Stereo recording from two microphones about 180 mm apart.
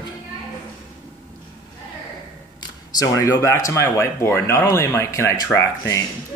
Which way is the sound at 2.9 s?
20° left (ahead or behind).